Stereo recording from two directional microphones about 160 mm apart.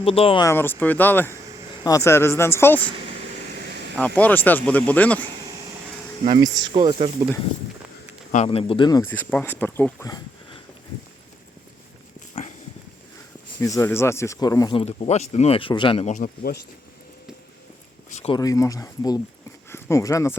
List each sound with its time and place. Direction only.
0.0 s speech: 35° left (ahead or behind)
0.4 s speech: 15° left (ahead or behind)
4.0 s speech: 10° left (ahead or behind)
6.2 s speech: 25° right (ahead or behind)
8.4 s speech: 35° left (ahead or behind)
9.0 s speech: 10° left (ahead or behind)
12.3 s a sound: 45° left (ahead or behind)
13.6 s speech: 20° left (ahead or behind)
14.8 s speech: 40° left (ahead or behind)
16.0 s speech: 55° left (ahead or behind)
18.3 s speech: 20° left (ahead or behind)